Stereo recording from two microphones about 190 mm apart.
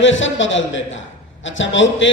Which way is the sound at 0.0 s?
80° left.